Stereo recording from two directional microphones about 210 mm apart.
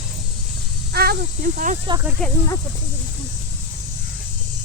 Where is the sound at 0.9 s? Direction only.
45° right (ahead or behind).